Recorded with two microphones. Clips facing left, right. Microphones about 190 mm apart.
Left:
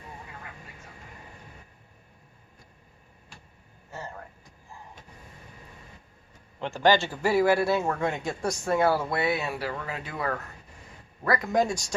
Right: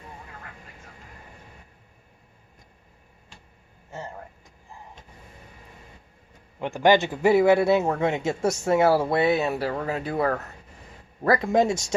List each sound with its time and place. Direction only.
6.6 s speech: 15° right (ahead or behind)